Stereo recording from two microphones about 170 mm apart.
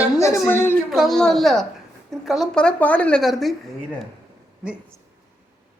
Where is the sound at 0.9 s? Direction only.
Centre (ahead or behind).